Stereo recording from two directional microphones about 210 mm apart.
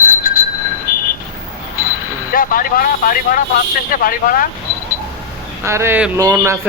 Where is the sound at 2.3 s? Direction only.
40° left (ahead or behind).